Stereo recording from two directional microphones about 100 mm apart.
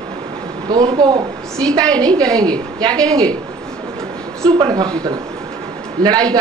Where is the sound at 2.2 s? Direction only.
40° right (ahead or behind).